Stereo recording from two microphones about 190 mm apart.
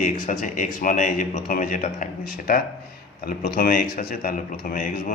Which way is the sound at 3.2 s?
50° left (ahead or behind).